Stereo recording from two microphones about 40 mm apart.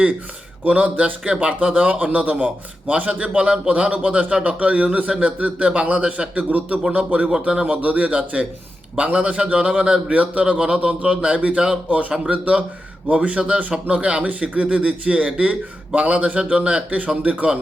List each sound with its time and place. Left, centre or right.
0.7 s speech: right
1.5 s a man's voice: right